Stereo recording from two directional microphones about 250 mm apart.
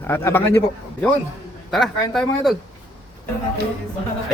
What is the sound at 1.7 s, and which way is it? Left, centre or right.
Speech, centre.